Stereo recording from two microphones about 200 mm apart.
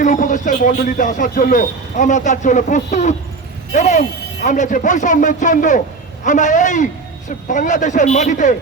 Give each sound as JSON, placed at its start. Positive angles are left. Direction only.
{"t": 0.0, "sound": "speech", "side_deg": 40}